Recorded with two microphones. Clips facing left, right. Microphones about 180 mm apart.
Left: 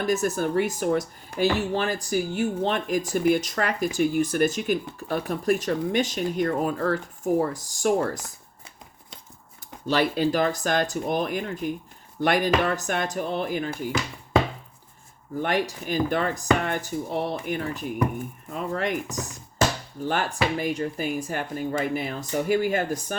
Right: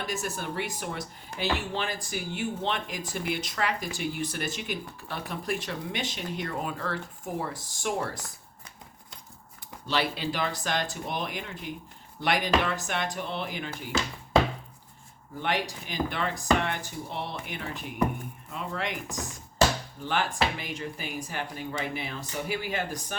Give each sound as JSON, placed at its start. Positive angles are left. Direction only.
{"t": 0.0, "sound": "speech", "side_deg": 45}
{"t": 9.8, "sound": "speech", "side_deg": 45}
{"t": 15.4, "sound": "speech", "side_deg": 45}